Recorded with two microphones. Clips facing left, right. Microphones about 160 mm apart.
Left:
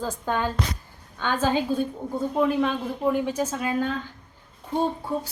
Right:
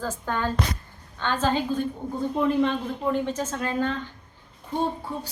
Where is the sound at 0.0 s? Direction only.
15° left (ahead or behind).